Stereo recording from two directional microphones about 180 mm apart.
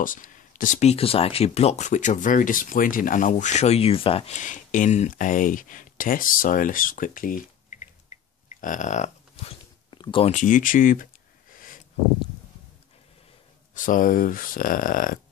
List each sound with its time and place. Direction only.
0.0 s speech: 50° left (ahead or behind); by 10.3 s 25° left (ahead or behind)
10.3 s speech: 45° left (ahead or behind)
11.5 s a sound: 50° left (ahead or behind)
13.7 s speech: 50° left (ahead or behind)